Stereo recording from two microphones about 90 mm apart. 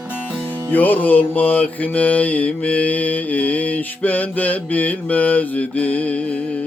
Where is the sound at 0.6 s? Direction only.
20° left (ahead or behind).